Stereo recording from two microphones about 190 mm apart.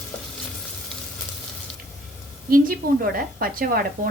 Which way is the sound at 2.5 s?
50° right (ahead or behind).